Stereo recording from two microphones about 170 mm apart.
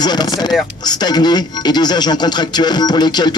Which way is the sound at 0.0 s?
25° left (ahead or behind).